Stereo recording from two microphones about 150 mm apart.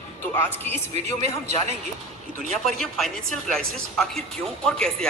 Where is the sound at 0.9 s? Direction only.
50° right (ahead or behind).